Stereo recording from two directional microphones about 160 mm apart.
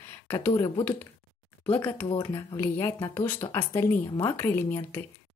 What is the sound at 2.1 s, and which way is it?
Speech, 25° left (ahead or behind).